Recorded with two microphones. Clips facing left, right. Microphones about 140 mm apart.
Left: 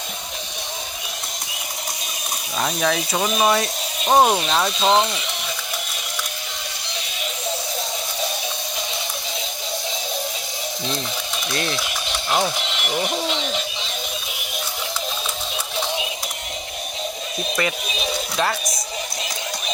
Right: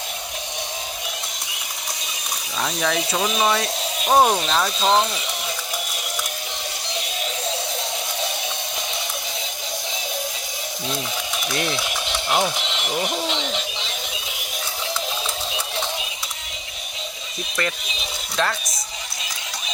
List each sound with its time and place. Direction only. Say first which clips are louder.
2.6 s speech: left 2 dB; 5° left (ahead or behind)
4.2 s speech: left 1 dB; 15° left (ahead or behind)
4.4 s speech: left 1 dB; centre (ahead or behind)
11.4 s a sound: even; 15° right (ahead or behind)